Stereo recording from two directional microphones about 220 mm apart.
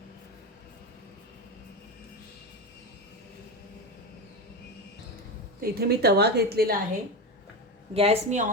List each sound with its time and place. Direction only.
5.5 s a woman's voice: 45° right (ahead or behind)
7.9 s a woman's voice: 25° right (ahead or behind)